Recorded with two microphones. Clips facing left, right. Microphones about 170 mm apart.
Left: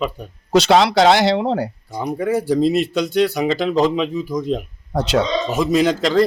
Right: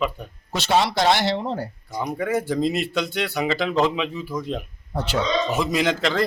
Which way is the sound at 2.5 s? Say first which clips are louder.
Left 6 dB; 35° left (ahead or behind).